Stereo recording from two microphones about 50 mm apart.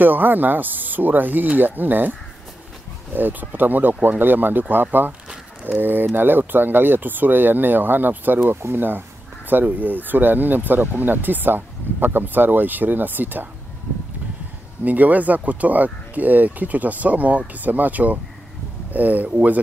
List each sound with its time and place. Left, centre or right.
0.0 s speech: right
3.2 s speech: right
14.9 s speech: right